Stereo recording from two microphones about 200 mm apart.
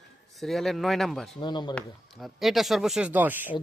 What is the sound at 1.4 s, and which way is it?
Speech, 20° left (ahead or behind).